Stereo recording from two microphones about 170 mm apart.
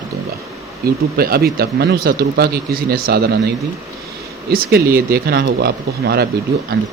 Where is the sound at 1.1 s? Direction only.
65° right (ahead or behind).